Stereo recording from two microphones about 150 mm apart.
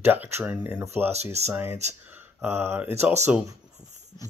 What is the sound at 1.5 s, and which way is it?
Speech, 15° right (ahead or behind).